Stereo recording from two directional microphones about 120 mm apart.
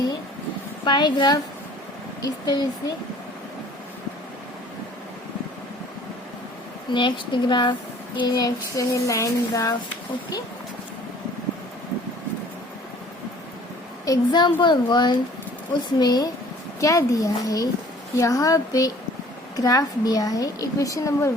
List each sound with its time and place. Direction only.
0.9 s a child's voice: 40° left (ahead or behind)
6.9 s a child's voice: 40° left (ahead or behind)
14.0 s a child's voice: 35° left (ahead or behind)